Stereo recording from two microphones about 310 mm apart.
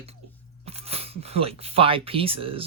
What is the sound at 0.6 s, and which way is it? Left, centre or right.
Speech, centre.